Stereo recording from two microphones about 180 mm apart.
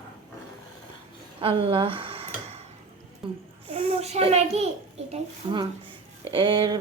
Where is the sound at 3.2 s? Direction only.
30° right (ahead or behind).